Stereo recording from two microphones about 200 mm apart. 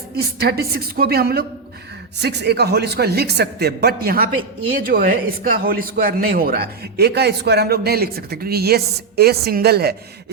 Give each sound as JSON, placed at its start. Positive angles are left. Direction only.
{"t": 0.2, "sound": "a man's voice", "side_deg": -50}